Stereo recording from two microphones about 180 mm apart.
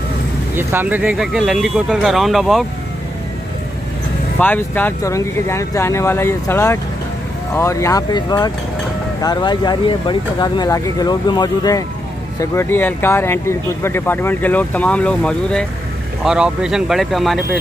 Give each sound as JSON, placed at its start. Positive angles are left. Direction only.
{"t": 0.6, "sound": "speech", "side_deg": -10}
{"t": 4.4, "sound": "speech", "side_deg": 10}